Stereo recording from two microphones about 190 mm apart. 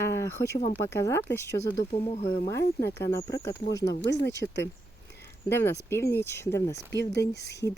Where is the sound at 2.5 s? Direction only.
15° left (ahead or behind).